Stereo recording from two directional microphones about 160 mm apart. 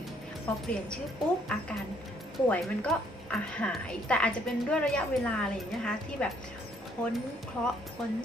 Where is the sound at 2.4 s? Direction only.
10° left (ahead or behind).